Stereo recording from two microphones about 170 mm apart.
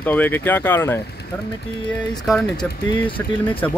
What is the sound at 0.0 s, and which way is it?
Speech, 10° left (ahead or behind).